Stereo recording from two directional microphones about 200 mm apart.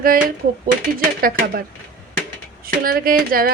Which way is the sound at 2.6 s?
45° right (ahead or behind).